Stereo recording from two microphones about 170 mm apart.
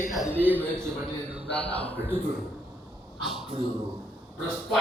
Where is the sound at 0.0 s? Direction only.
15° left (ahead or behind).